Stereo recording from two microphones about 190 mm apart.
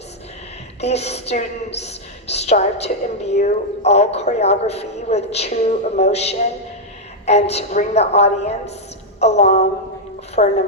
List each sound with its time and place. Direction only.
0.8 s a woman's voice: 35° left (ahead or behind)